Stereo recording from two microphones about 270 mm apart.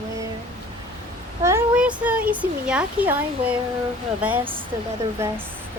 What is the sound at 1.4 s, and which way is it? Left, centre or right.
A woman's voice, centre.